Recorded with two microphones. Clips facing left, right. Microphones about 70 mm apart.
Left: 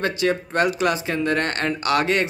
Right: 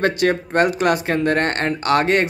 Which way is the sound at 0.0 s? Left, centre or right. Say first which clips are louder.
Right 4 dB; right.